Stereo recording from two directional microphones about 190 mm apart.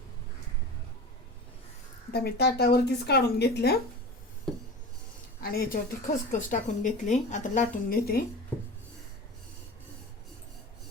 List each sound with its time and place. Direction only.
2.1 s speech: 55° left (ahead or behind)
4.5 s wood: centre (ahead or behind)
5.4 s a woman's voice: 50° left (ahead or behind)